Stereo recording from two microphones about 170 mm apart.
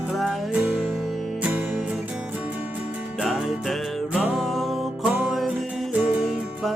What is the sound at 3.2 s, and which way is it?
Music, centre (ahead or behind).